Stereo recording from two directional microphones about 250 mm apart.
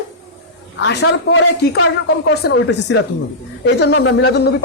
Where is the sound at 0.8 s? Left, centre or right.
Left.